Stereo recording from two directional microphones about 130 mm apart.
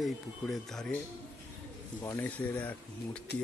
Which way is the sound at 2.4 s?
10° left (ahead or behind).